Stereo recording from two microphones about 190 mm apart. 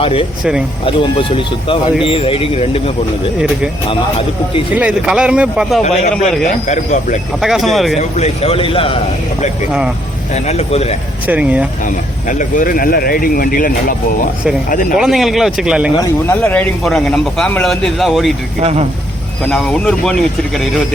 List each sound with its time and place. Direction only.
0.0 s speech: 30° left (ahead or behind)
4.8 s a man's voice: 5° right (ahead or behind)
6.0 s a man's voice: 40° left (ahead or behind)
7.4 s a man's voice: centre (ahead or behind)
7.9 s speech: 35° left (ahead or behind)
10.3 s a man's voice: 35° left (ahead or behind)
11.3 s speech: 10° right (ahead or behind)
12.3 s speech: 45° left (ahead or behind)
14.9 s a man's voice: centre (ahead or behind)
16.2 s a man's voice: 10° left (ahead or behind)
18.6 s speech: 35° right (ahead or behind)
19.5 s a man's voice: 5° left (ahead or behind)